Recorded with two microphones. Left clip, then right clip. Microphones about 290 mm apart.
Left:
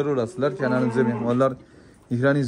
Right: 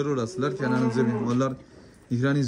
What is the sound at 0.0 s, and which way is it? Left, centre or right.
Speech, centre.